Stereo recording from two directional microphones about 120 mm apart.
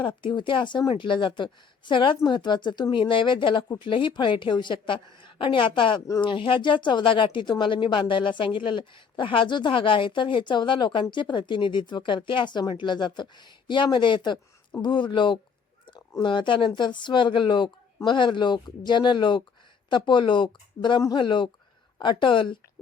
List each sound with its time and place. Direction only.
0.0 s speech: 40° left (ahead or behind)